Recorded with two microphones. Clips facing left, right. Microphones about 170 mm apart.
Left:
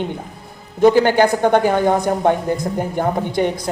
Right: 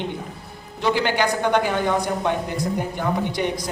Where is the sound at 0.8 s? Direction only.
45° left (ahead or behind).